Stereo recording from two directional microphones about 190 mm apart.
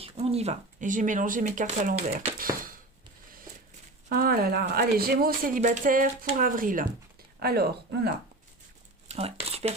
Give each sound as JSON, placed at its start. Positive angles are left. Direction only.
{"t": 0.0, "sound": "speech", "side_deg": -30}
{"t": 4.1, "sound": "speech", "side_deg": -50}
{"t": 9.0, "sound": "a sound", "side_deg": -35}